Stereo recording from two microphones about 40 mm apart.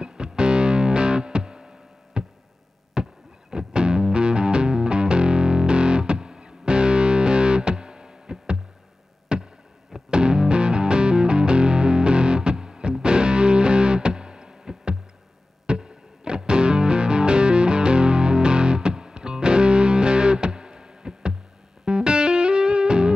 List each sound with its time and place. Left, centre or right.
0.0 s music: right